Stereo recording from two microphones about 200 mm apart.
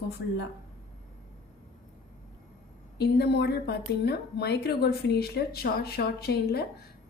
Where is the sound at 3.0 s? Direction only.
55° left (ahead or behind).